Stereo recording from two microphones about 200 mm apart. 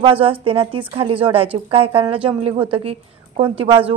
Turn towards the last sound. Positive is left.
turn(degrees=-25)  # may be behind; listen again after turning